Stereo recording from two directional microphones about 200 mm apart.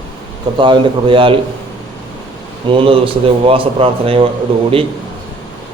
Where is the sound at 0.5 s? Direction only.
25° right (ahead or behind).